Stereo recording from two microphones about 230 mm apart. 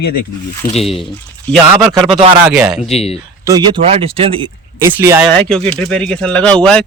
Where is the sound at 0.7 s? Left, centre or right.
Left.